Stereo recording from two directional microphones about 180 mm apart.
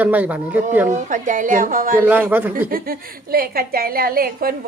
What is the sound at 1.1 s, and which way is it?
Speech, 45° right (ahead or behind).